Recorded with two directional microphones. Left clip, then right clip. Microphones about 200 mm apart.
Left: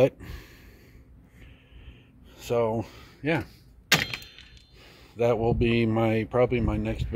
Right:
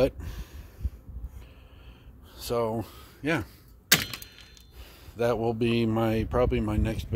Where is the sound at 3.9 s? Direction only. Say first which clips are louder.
Left 1 dB; 65° right (ahead or behind).